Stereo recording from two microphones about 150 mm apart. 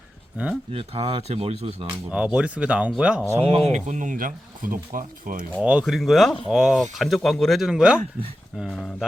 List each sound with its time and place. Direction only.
0.7 s speech: 40° right (ahead or behind)
2.0 s speech: 5° right (ahead or behind)
3.3 s speech: 40° right (ahead or behind); by 5.5 s 70° right (ahead or behind)
5.6 s speech: 5° right (ahead or behind)